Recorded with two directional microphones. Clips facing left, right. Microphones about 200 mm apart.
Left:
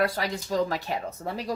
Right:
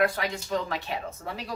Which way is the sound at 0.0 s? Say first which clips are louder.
Even; 35° left (ahead or behind).